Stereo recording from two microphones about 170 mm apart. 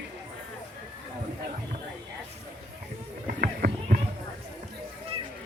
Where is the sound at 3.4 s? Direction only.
50° right (ahead or behind).